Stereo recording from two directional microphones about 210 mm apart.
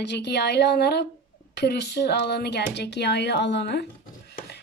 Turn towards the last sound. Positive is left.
turn(degrees=50)  # may be behind; listen again after turning